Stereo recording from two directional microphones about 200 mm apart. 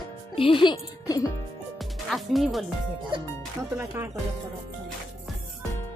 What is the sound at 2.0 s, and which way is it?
Speech, centre (ahead or behind).